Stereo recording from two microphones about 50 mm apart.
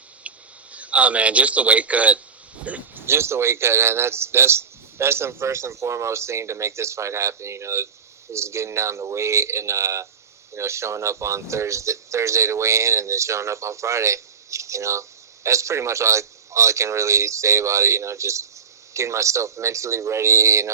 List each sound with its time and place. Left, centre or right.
0.3 s speech: right
2.6 s a sound: right
3.1 s a man's voice: right